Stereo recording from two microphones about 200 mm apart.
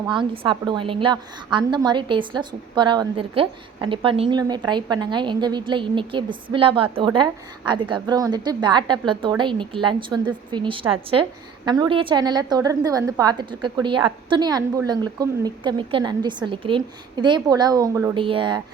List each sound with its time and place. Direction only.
0.1 s a woman's voice: 25° right (ahead or behind)